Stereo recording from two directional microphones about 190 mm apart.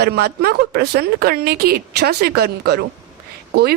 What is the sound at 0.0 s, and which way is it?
A woman's voice, 55° right (ahead or behind).